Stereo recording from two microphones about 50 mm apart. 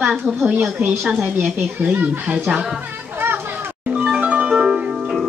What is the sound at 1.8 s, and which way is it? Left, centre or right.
Speech, right.